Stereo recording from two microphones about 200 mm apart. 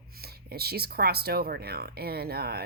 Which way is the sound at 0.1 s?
50° right (ahead or behind).